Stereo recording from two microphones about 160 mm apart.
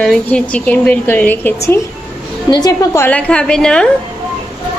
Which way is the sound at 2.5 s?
25° left (ahead or behind).